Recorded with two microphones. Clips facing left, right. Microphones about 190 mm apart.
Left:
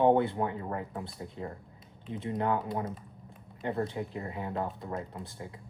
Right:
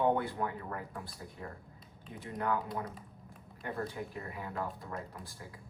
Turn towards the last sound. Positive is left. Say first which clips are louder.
# left 5 dB
turn(degrees=25)  # may be behind; listen again after turning